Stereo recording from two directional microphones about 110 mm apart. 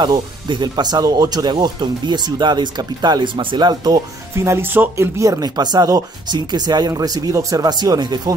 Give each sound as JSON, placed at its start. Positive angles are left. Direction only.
{"t": 0.0, "sound": "speech", "side_deg": -45}
{"t": 4.5, "sound": "speech", "side_deg": -20}